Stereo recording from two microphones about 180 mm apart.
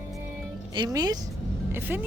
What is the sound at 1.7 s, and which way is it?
Speech, 10° right (ahead or behind).